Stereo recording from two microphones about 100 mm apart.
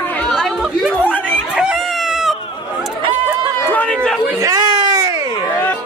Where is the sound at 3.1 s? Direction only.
20° right (ahead or behind).